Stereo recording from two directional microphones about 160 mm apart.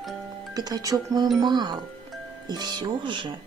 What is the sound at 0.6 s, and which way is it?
Speech, 25° right (ahead or behind).